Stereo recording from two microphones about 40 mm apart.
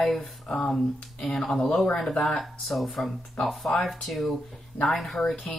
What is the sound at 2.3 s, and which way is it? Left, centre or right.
Speech, centre.